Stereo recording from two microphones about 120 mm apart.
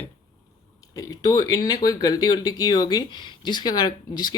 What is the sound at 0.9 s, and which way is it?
Speech, 30° left (ahead or behind).